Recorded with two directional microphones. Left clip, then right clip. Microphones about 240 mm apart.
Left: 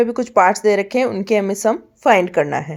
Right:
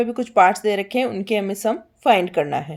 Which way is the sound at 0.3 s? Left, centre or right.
Centre.